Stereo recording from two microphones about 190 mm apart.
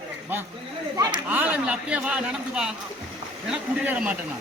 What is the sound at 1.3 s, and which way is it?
Speech, 10° right (ahead or behind).